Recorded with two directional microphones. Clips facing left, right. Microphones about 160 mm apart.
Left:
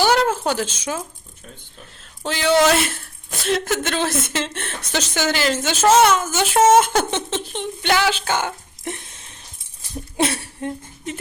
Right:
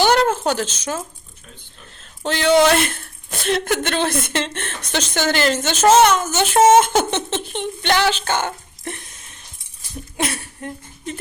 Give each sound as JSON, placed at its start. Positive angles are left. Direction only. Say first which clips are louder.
{"t": 0.0, "sound": "a sound", "louder": "right 2 dB", "side_deg": 5}
{"t": 2.2, "sound": "a woman's voice", "louder": "right 2 dB", "side_deg": 5}
{"t": 10.2, "sound": "speech", "louder": "left 4 dB", "side_deg": 30}